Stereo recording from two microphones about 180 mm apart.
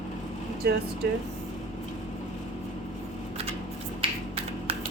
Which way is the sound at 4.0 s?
35° right (ahead or behind).